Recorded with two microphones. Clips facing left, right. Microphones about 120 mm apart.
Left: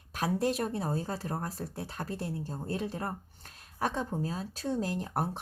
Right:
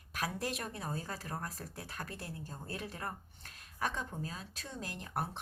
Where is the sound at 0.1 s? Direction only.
30° left (ahead or behind).